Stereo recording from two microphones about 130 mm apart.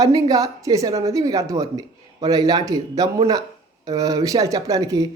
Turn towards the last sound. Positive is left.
turn(degrees=-25)  # may be behind; listen again after turning